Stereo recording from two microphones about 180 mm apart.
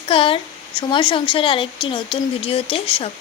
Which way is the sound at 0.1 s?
30° left (ahead or behind).